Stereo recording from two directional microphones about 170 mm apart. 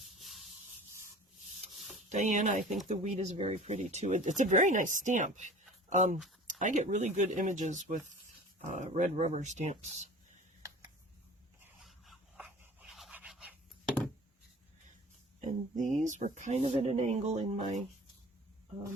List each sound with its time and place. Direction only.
0.2 s rub: centre (ahead or behind)
2.0 s speech: 45° right (ahead or behind)
11.8 s dog: centre (ahead or behind)
15.4 s speech: 50° right (ahead or behind)